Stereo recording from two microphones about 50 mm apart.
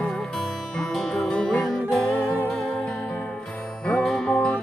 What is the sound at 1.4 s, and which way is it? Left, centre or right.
Music, left.